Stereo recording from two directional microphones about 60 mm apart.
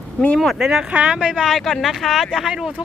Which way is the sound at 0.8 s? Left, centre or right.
Centre.